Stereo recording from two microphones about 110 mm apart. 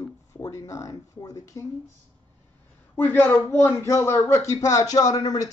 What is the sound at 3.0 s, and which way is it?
A man's voice, 15° left (ahead or behind).